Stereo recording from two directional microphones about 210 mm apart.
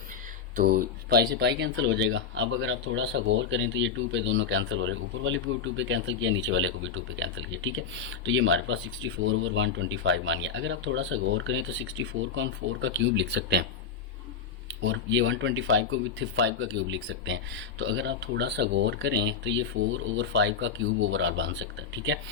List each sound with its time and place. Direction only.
0.5 s speech: 40° right (ahead or behind)
14.8 s speech: 60° right (ahead or behind)